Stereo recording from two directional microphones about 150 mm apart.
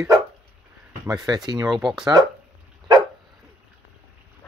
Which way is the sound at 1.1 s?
25° right (ahead or behind).